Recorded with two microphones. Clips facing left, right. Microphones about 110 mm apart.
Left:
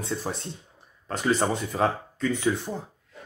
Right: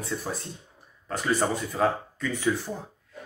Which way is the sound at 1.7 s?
30° left (ahead or behind).